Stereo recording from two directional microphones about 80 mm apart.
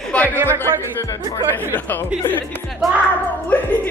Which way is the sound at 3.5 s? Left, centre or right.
Left.